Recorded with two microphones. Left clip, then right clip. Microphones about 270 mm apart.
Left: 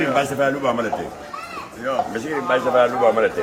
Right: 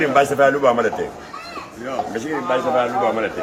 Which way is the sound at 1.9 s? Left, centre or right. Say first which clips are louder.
Left 1 dB; centre.